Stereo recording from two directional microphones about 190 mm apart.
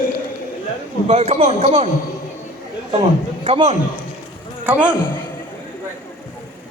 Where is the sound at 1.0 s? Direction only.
35° right (ahead or behind).